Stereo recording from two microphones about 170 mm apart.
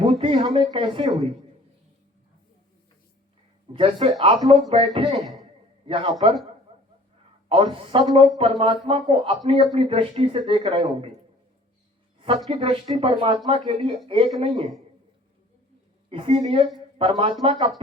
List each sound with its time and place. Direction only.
0.0 s speech: 30° right (ahead or behind)
3.7 s speech: 30° right (ahead or behind)
6.7 s a sound: 35° right (ahead or behind)
7.4 s speech: 30° right (ahead or behind)
12.5 s speech: 35° right (ahead or behind)
16.0 s speech: 35° right (ahead or behind)